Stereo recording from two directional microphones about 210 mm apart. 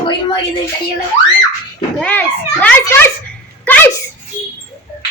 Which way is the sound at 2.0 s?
5° left (ahead or behind).